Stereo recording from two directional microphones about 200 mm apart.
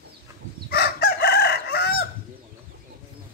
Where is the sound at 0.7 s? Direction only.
50° left (ahead or behind).